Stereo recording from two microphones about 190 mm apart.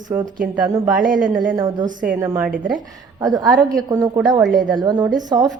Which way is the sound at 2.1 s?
20° right (ahead or behind).